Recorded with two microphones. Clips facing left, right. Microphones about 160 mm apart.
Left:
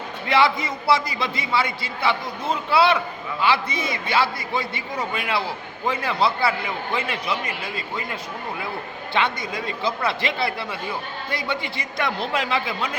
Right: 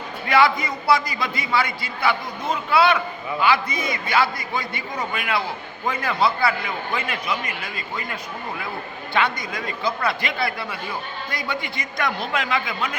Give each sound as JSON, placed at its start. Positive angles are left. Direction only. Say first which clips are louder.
{"t": 0.3, "sound": "a man's voice", "louder": "right 1 dB", "side_deg": 25}
{"t": 9.1, "sound": "a man's voice", "louder": "right 1 dB", "side_deg": 25}